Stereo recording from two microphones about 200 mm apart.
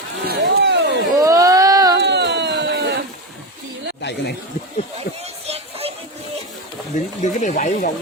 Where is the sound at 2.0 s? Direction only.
60° right (ahead or behind).